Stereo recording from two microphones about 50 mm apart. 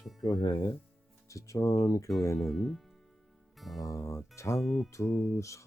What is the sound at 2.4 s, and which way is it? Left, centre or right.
Speech, centre.